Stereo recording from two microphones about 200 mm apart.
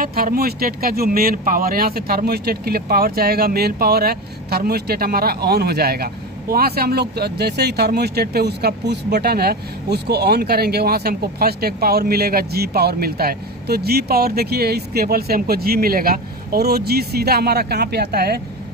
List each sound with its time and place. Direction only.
0.0 s speech: 45° right (ahead or behind)